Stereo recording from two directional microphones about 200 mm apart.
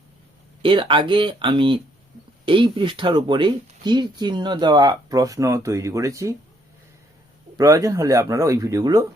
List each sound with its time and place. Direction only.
0.6 s speech: 25° right (ahead or behind)
7.6 s speech: 15° right (ahead or behind)